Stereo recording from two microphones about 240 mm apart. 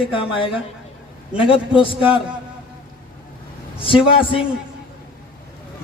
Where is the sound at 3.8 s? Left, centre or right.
Left.